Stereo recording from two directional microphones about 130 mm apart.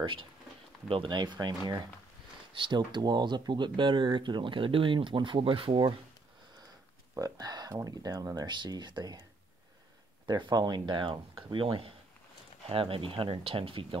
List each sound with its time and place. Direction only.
0.0 s speech: 40° right (ahead or behind)
7.2 s speech: 30° right (ahead or behind)
10.2 s speech: 35° right (ahead or behind)